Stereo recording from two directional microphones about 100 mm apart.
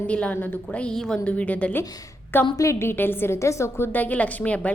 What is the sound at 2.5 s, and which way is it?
A woman's voice, 30° left (ahead or behind).